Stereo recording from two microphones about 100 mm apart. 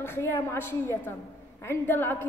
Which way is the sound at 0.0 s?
25° left (ahead or behind).